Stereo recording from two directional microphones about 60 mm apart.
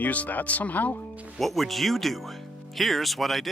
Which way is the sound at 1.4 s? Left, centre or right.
Centre.